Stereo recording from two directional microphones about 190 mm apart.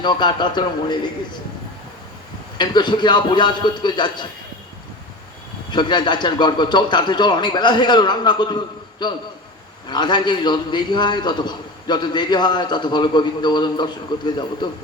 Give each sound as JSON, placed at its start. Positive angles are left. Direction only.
{"t": 0.0, "sound": "a man's voice", "side_deg": 25}
{"t": 2.6, "sound": "a man's voice", "side_deg": 25}
{"t": 5.7, "sound": "a man's voice", "side_deg": 25}